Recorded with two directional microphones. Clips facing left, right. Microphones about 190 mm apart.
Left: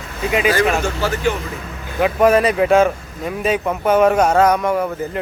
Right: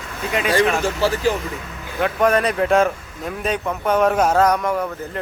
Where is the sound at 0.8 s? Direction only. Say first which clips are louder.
Even; 35° right (ahead or behind).